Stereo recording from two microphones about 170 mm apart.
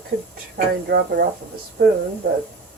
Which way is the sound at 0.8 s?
70° right (ahead or behind).